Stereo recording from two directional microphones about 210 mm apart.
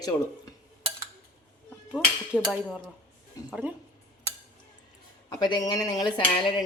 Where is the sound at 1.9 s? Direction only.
5° right (ahead or behind).